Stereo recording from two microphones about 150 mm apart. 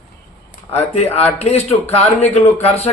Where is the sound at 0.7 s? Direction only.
45° left (ahead or behind).